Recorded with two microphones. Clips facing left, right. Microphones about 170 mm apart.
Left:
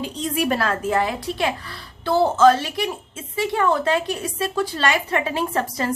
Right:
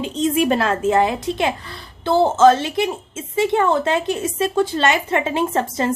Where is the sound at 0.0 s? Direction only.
20° right (ahead or behind).